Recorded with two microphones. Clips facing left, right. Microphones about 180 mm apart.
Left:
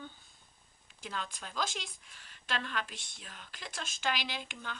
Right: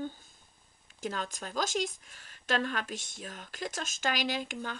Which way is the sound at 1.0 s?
45° right (ahead or behind).